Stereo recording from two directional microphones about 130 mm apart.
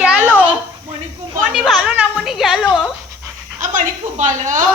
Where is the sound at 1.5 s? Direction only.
5° right (ahead or behind).